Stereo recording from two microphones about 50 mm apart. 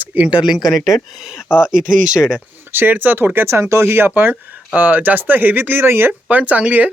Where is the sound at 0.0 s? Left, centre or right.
Right.